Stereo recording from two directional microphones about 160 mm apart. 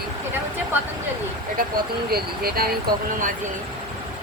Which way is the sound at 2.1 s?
70° right (ahead or behind).